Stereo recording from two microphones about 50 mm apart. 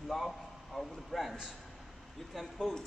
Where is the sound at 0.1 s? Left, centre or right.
Centre.